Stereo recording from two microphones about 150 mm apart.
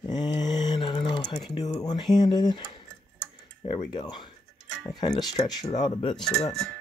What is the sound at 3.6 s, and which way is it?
Speech, 30° left (ahead or behind).